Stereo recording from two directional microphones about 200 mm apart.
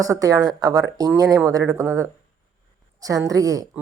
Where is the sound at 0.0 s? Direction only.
15° right (ahead or behind).